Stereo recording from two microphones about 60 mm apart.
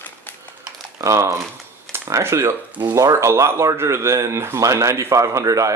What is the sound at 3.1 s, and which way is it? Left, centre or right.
Speech, right.